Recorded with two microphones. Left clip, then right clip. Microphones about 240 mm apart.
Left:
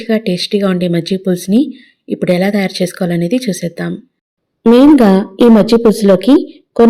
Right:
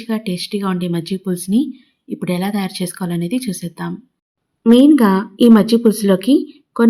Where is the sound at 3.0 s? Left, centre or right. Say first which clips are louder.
Left 7 dB; right.